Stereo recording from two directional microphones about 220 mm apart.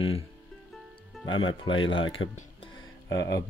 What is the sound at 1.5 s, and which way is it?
Speech, 20° left (ahead or behind).